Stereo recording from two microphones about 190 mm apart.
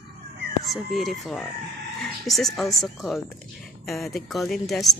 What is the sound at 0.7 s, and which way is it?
A woman's voice, centre (ahead or behind).